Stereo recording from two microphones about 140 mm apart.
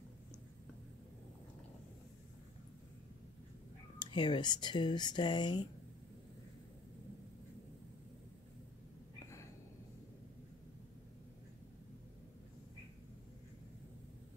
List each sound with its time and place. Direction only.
4.1 s speech: 35° left (ahead or behind)